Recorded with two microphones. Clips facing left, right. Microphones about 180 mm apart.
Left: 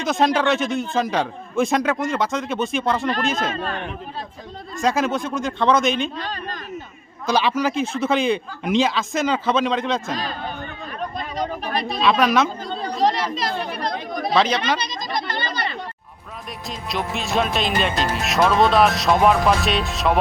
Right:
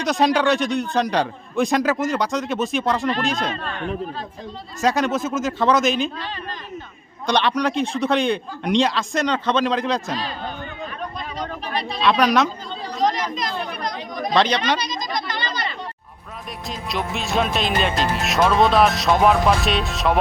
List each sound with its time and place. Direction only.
0.0 s speech: centre (ahead or behind)
4.8 s speech: centre (ahead or behind)
7.3 s speech: 5° left (ahead or behind)
11.3 s a sound: 45° left (ahead or behind)
11.9 s a woman's voice: centre (ahead or behind)
13.0 s chatter: 30° left (ahead or behind)
14.3 s speech: 5° left (ahead or behind)
15.3 s a sound: 55° left (ahead or behind)
16.6 s speech: centre (ahead or behind)